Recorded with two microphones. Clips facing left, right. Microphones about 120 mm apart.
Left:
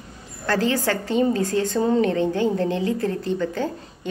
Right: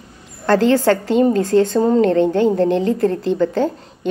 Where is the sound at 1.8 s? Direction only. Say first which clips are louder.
Right 6 dB; 50° right (ahead or behind).